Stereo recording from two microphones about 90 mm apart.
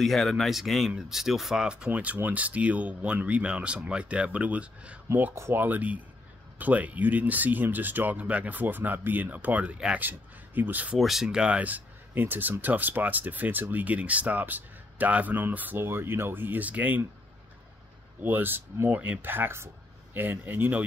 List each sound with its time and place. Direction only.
0.0 s speech: centre (ahead or behind); by 4.9 s 15° right (ahead or behind)
5.1 s speech: 30° right (ahead or behind)
11.0 s speech: 5° right (ahead or behind)
18.2 s speech: 20° right (ahead or behind)